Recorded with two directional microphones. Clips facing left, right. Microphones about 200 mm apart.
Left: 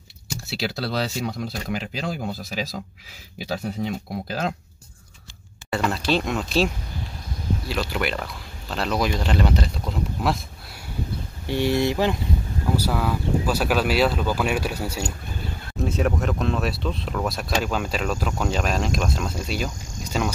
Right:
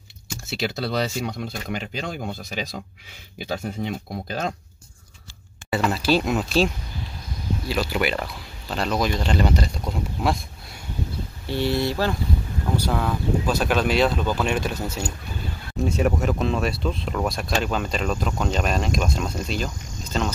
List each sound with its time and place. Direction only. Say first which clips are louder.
0.5 s speech: right 1 dB; centre (ahead or behind)
5.7 s speech: right 2 dB; 5° right (ahead or behind)
7.9 s speech: right 2 dB; 5° right (ahead or behind)
11.4 s speech: left 2 dB; 15° left (ahead or behind)
12.7 s speech: even; 5° left (ahead or behind)
15.8 s a sound: right 1 dB; centre (ahead or behind)
16.2 s speech: right 1 dB; centre (ahead or behind)